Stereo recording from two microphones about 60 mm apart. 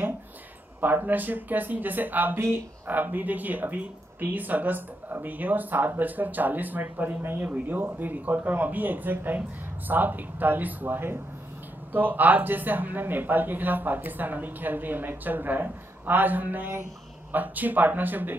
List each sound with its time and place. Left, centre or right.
0.7 s speech: right